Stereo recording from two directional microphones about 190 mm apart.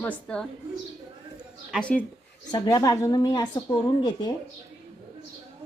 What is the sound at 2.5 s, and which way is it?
Speech, 20° left (ahead or behind).